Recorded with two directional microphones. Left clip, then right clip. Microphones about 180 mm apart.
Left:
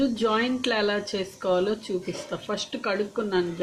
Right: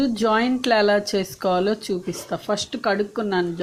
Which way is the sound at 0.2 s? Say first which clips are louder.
Right 4 dB; 50° right (ahead or behind).